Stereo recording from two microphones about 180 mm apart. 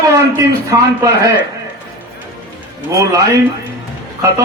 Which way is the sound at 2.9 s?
15° right (ahead or behind).